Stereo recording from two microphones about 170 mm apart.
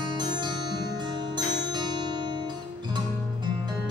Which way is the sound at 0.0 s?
25° right (ahead or behind).